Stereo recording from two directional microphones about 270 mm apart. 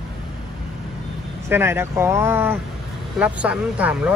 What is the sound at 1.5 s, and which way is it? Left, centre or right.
Speech, centre.